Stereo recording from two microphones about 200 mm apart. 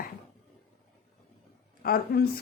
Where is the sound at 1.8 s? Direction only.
50° left (ahead or behind).